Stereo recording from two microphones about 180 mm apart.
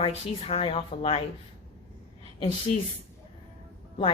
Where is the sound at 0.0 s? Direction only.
30° left (ahead or behind).